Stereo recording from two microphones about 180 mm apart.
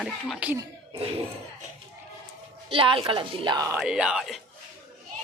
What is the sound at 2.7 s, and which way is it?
A woman's voice, 30° right (ahead or behind).